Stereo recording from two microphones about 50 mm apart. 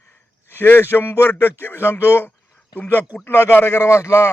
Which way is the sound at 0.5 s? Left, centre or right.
Left.